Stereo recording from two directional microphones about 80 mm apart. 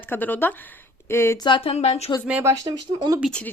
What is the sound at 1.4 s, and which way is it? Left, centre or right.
Speech, left.